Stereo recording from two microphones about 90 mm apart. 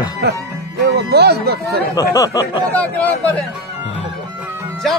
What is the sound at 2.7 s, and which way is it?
Speech, 20° left (ahead or behind).